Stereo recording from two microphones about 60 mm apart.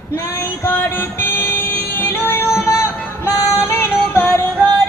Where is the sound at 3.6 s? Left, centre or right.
Left.